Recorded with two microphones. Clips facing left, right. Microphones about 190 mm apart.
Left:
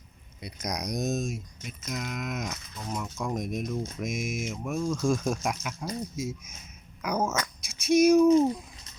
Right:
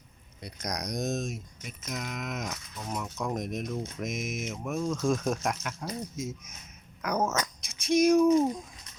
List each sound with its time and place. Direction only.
0.4 s speech: 5° left (ahead or behind)
5.8 s speech: 15° left (ahead or behind)
7.0 s speech: centre (ahead or behind)
7.3 s a sound: 15° right (ahead or behind)
8.0 s speech: 5° left (ahead or behind)